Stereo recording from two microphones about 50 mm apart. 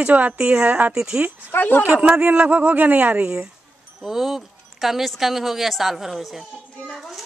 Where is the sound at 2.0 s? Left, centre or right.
Right.